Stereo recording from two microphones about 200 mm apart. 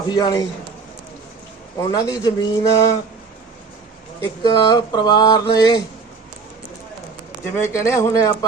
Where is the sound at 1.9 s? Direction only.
20° left (ahead or behind).